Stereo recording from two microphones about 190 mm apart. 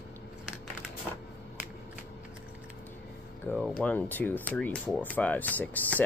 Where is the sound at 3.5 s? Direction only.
5° left (ahead or behind).